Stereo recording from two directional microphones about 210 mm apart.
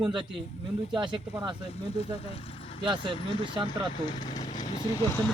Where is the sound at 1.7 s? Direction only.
30° left (ahead or behind).